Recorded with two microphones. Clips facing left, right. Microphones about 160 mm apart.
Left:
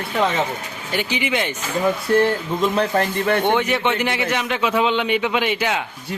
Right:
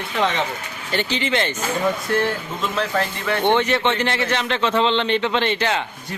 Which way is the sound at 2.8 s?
45° left (ahead or behind).